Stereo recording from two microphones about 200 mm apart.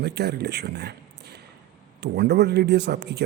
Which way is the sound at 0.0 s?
55° right (ahead or behind).